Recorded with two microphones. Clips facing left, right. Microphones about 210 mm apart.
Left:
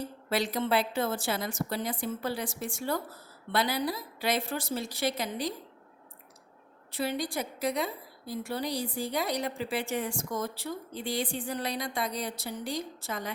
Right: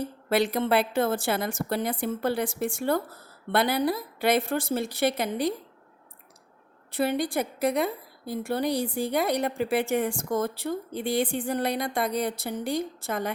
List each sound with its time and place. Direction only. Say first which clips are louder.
0.3 s a woman's voice: right 5 dB; 60° right (ahead or behind)
6.9 s a woman's voice: right 6 dB; 55° right (ahead or behind)